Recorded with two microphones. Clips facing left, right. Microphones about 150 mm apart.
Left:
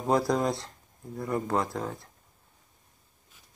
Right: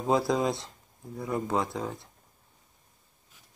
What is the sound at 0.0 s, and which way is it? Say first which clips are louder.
Speech: even; centre (ahead or behind).